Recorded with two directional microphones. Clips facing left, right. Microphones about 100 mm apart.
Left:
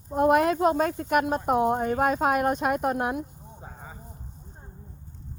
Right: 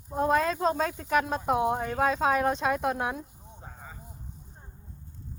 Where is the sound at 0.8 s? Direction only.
50° left (ahead or behind).